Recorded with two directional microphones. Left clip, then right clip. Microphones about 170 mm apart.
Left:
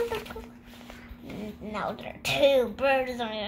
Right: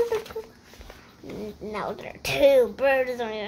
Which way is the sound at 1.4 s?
30° right (ahead or behind).